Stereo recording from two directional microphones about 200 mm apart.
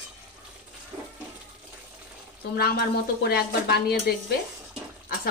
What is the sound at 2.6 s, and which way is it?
A woman's voice, 50° left (ahead or behind).